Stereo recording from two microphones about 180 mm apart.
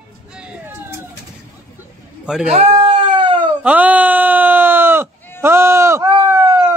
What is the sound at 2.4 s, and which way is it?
Baby cry, 40° right (ahead or behind).